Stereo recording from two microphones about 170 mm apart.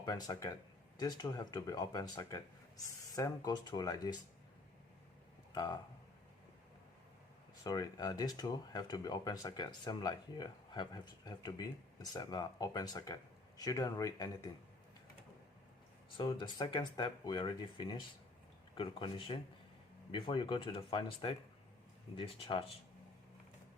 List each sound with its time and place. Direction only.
0.0 s speech: 25° left (ahead or behind)
5.5 s speech: 25° left (ahead or behind)
7.6 s speech: 20° left (ahead or behind)
16.1 s speech: 30° left (ahead or behind)